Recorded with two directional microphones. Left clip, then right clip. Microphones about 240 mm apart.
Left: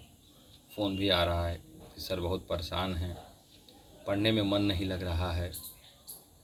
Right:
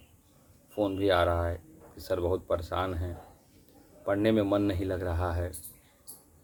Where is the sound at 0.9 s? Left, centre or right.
Centre.